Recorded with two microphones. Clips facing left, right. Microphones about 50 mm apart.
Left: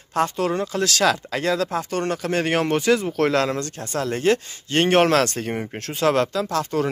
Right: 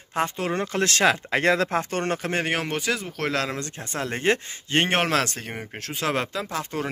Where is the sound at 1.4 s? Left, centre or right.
Right.